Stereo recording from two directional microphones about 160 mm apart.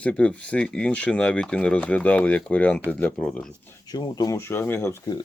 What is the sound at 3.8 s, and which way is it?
Speech, 25° left (ahead or behind).